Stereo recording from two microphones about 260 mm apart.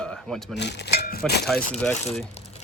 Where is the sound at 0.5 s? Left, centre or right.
Left.